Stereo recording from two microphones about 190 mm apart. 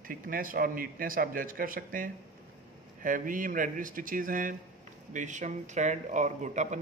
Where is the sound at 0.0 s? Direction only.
45° right (ahead or behind).